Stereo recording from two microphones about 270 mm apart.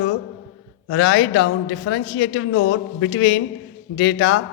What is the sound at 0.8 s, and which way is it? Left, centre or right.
A woman's voice, left.